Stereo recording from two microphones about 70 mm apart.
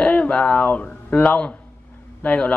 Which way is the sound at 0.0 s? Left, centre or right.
Centre.